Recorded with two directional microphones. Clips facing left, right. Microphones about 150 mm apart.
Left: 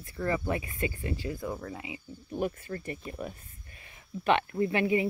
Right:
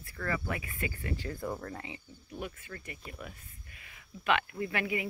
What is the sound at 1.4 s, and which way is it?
Speech, centre (ahead or behind).